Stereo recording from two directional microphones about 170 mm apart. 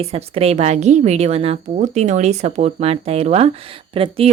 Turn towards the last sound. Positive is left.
turn(degrees=-30)  # may be behind; listen again after turning